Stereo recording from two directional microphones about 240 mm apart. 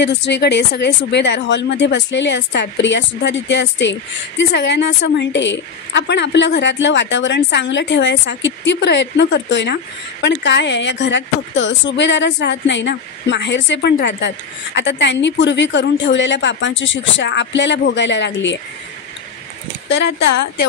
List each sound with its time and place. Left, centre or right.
0.0 s a woman's voice: left
20.2 s a woman's voice: left